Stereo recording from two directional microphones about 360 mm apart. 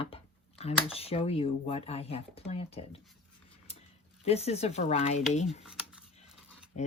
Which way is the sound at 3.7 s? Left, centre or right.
Centre.